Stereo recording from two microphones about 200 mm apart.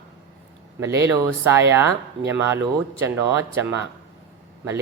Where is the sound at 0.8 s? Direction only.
15° right (ahead or behind).